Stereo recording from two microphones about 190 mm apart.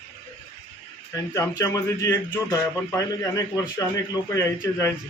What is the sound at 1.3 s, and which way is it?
Speech, 15° left (ahead or behind).